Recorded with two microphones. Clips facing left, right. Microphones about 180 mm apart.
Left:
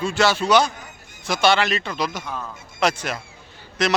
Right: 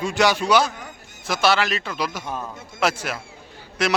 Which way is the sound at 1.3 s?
Centre (ahead or behind).